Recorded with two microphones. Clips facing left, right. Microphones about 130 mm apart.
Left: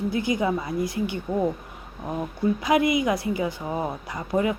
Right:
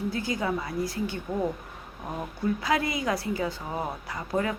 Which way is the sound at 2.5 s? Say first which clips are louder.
Left 8 dB; 20° left (ahead or behind).